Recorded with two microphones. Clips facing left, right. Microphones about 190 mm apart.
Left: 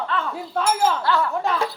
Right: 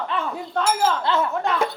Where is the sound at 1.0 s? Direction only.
20° right (ahead or behind).